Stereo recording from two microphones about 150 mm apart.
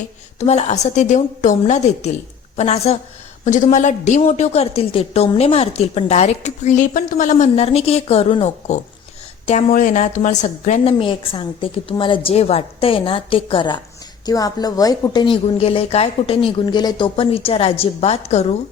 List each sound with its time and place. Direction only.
0.3 s a woman's voice: 45° left (ahead or behind)
10.8 s a woman's voice: 35° left (ahead or behind)